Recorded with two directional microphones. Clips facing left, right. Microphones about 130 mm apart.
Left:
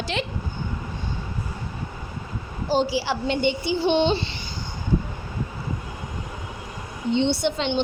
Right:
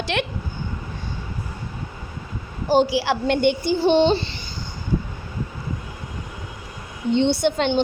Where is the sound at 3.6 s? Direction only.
35° right (ahead or behind).